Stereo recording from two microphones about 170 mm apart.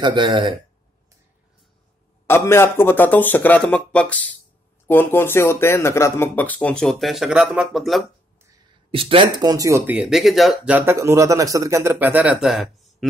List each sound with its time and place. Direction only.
0.0 s speech: 30° right (ahead or behind)
2.2 s speech: 15° left (ahead or behind); by 8.0 s centre (ahead or behind)
8.9 s speech: 30° right (ahead or behind); by 12.7 s centre (ahead or behind)